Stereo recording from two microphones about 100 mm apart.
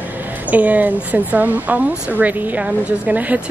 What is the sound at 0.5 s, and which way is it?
A woman's voice, 15° right (ahead or behind).